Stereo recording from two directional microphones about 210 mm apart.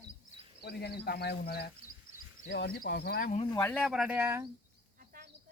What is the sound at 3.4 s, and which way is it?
Speech, 20° left (ahead or behind).